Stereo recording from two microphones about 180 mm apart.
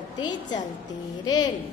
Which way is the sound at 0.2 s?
25° left (ahead or behind).